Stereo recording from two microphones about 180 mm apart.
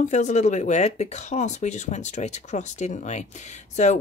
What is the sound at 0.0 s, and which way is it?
Speech, 40° left (ahead or behind).